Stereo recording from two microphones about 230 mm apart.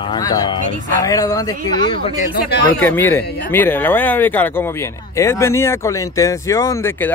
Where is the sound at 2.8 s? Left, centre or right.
Centre.